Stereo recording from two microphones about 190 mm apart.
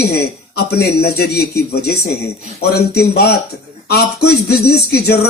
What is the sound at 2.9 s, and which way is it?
A man's voice, 55° left (ahead or behind).